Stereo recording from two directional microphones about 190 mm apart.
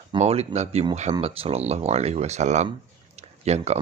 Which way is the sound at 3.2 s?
35° right (ahead or behind).